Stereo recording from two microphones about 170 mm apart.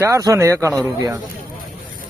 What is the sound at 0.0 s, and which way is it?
Speech, 20° right (ahead or behind).